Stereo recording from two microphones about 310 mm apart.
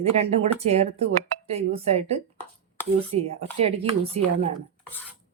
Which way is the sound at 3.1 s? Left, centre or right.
Right.